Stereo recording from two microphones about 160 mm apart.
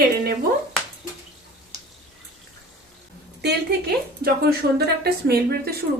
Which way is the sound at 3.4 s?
80° right.